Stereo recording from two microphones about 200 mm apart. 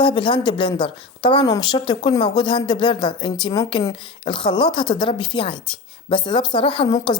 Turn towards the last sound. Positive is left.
turn(degrees=25)  # may be behind; listen again after turning